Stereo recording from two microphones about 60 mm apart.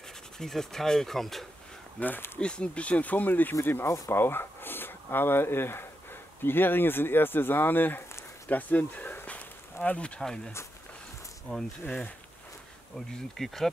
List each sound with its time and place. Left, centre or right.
0.4 s speech: centre
2.0 s speech: left
2.3 s speech: centre; by 8.0 s left
8.5 s a sound: left
10.2 s bee: centre
11.5 s speech: left
12.9 s bee: centre